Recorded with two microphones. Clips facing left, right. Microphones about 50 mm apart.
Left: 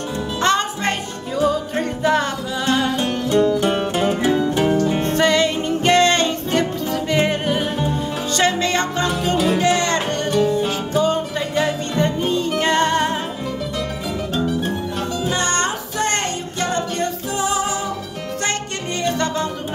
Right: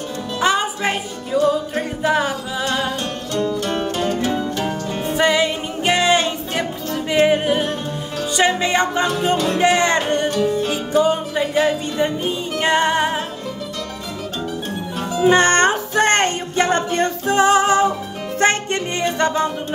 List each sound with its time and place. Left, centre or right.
0.4 s music: centre
3.0 s music: centre
5.0 s music: centre
10.3 s music: centre
10.9 s music: centre
15.2 s music: right
19.0 s music: centre